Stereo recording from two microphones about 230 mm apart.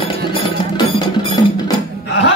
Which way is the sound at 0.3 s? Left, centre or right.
Centre.